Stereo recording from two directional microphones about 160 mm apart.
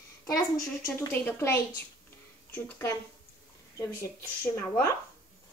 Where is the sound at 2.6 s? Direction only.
15° left (ahead or behind).